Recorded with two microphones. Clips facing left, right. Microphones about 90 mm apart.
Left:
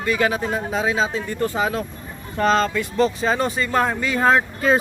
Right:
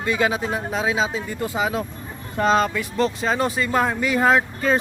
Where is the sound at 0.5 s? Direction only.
5° right (ahead or behind).